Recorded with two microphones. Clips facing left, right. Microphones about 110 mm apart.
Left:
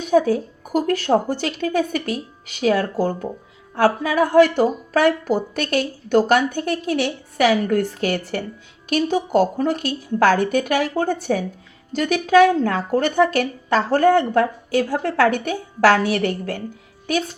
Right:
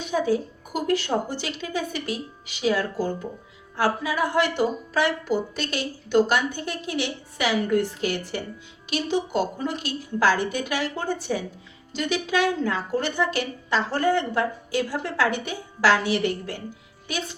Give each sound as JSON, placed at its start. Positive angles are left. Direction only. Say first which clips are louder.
{"t": 0.1, "sound": "a woman's voice", "louder": "left 7 dB", "side_deg": 55}